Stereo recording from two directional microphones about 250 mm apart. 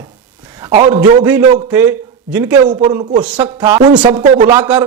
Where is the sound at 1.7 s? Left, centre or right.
Centre; by 4.5 s right.